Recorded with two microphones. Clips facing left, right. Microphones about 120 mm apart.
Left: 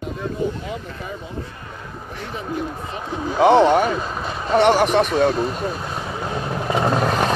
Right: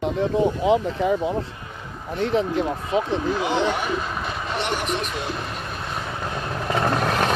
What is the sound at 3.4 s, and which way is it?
Speech, 65° left (ahead or behind).